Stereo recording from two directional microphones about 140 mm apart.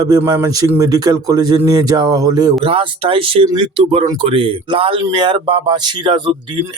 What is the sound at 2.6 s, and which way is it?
Speech, 40° right (ahead or behind).